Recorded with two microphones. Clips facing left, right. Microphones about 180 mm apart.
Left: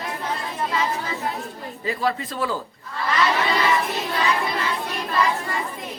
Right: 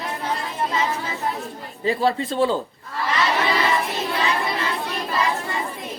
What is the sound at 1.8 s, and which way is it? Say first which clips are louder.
Speech: right 4 dB; 30° right (ahead or behind).